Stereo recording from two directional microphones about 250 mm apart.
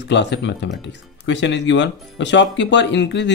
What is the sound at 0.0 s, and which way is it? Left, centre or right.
Speech, left.